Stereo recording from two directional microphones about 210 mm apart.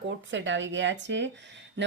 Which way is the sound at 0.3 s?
60° right (ahead or behind).